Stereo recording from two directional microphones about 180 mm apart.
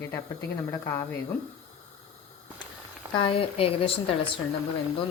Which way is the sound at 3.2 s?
30° left (ahead or behind).